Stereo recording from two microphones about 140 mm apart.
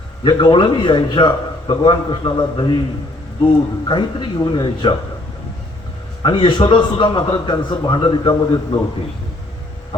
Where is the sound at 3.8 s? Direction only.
35° left (ahead or behind).